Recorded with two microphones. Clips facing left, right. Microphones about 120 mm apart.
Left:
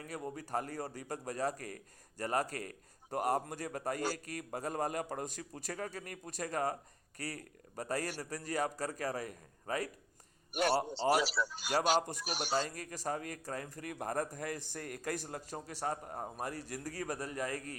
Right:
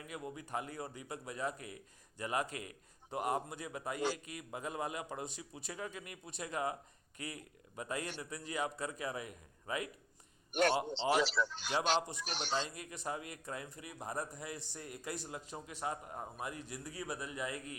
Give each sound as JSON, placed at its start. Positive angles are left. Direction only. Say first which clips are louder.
{"t": 0.0, "sound": "a man's voice", "louder": "left 3 dB", "side_deg": 40}
{"t": 10.5, "sound": "speech", "louder": "even", "side_deg": 10}
{"t": 11.9, "sound": "a man's voice", "louder": "left 3 dB", "side_deg": 45}
{"t": 12.2, "sound": "speech", "louder": "left 2 dB", "side_deg": 10}
{"t": 12.5, "sound": "a man's voice", "louder": "left 5 dB", "side_deg": 40}
{"t": 13.9, "sound": "a man's voice", "louder": "left 5 dB", "side_deg": 55}